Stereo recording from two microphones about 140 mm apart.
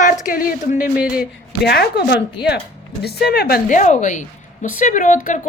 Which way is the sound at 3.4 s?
80° left.